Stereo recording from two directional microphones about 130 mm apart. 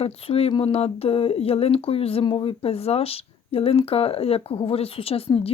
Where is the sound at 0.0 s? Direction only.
50° left (ahead or behind).